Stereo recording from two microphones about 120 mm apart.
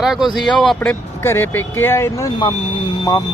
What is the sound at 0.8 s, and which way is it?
Speech, 20° left (ahead or behind).